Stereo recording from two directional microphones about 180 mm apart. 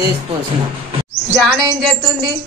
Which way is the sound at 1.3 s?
Centre (ahead or behind).